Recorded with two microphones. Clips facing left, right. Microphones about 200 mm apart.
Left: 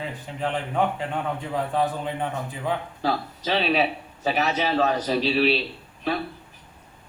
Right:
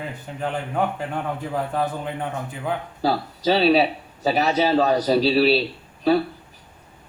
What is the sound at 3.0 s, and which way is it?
A man's voice, 35° right (ahead or behind).